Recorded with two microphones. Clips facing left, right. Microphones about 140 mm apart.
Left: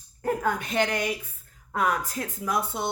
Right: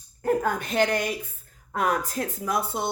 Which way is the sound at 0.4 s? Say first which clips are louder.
Right 2 dB; 40° right (ahead or behind).